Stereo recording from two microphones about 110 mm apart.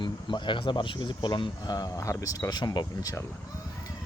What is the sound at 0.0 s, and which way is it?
Speech, 45° left (ahead or behind).